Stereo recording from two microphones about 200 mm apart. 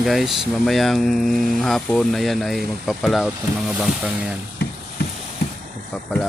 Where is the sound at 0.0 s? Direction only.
Centre (ahead or behind).